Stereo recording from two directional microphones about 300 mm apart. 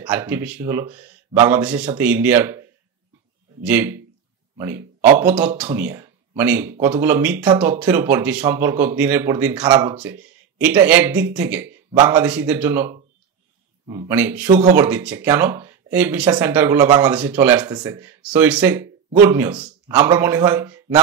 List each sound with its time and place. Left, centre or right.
0.0 s speech: centre
3.6 s speech: centre